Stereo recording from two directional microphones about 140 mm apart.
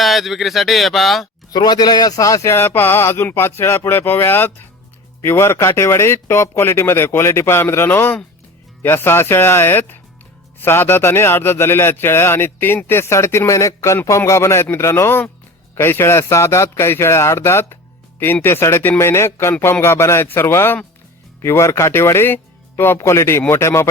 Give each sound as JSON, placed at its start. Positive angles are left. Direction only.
{"t": 0.0, "sound": "speech", "side_deg": 0}
{"t": 1.5, "sound": "a man's voice", "side_deg": 30}